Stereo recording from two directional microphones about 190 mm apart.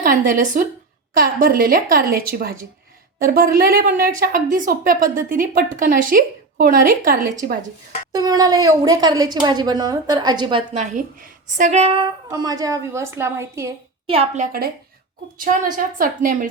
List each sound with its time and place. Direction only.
0.0 s a woman's voice: 45° right (ahead or behind)
8.1 s a woman's voice: 20° right (ahead or behind)
10.8 s a woman's voice: 45° right (ahead or behind)
12.3 s a woman's voice: 20° right (ahead or behind)
14.1 s a woman's voice: 30° right (ahead or behind)
15.4 s a woman's voice: 45° right (ahead or behind)